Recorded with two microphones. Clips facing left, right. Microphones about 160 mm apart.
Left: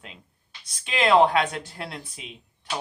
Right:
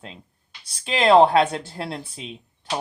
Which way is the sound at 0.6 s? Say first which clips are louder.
Right 3 dB; 30° right (ahead or behind).